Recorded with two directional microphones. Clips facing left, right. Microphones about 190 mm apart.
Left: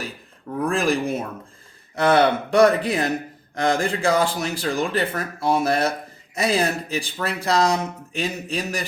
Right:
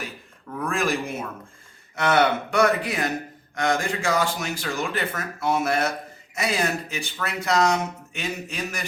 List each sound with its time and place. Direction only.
0.5 s speech: 35° left (ahead or behind)